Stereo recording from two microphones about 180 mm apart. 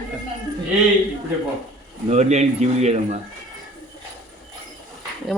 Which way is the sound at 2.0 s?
40° right (ahead or behind).